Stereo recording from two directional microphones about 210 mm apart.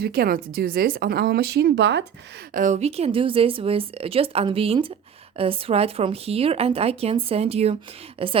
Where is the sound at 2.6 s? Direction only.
35° right (ahead or behind).